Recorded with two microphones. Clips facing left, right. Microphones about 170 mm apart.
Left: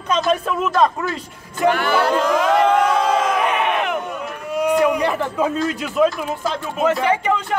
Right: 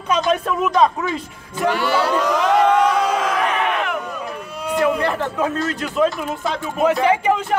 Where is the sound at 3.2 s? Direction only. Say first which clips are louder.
Left 1 dB; 20° left (ahead or behind).